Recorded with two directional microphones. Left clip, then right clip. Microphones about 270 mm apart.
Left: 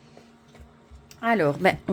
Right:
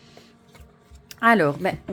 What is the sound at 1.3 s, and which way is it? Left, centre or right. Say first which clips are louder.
Speech: right 2 dB; centre.